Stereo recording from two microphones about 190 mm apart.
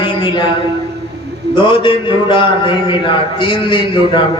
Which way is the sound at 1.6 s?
25° left (ahead or behind).